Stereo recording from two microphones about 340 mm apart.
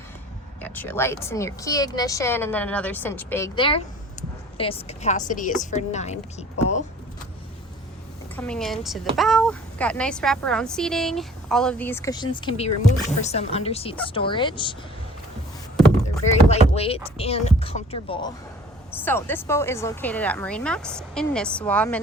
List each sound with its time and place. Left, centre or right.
0.6 s a woman's voice: centre
8.4 s a woman's voice: centre
16.2 s a woman's voice: centre